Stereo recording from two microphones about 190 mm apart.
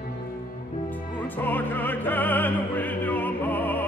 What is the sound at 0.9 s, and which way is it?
Opera, 10° left (ahead or behind).